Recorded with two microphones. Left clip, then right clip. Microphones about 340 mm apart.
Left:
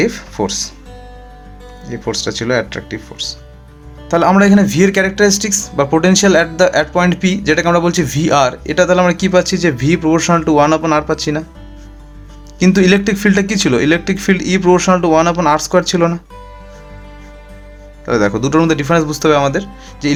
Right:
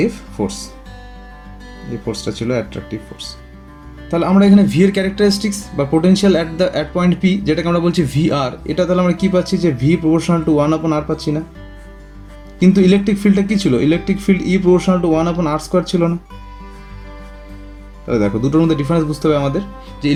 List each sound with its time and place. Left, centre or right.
0.0 s speech: left
2.1 s speech: left
12.5 s speech: left
18.1 s speech: left